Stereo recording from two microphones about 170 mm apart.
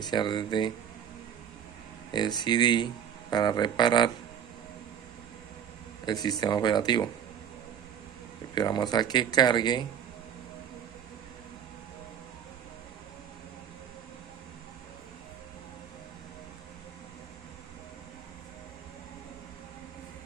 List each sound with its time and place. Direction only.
0.0 s speech: 25° left (ahead or behind)
2.0 s speech: 25° left (ahead or behind)
6.0 s speech: 25° left (ahead or behind)
8.5 s speech: 25° left (ahead or behind)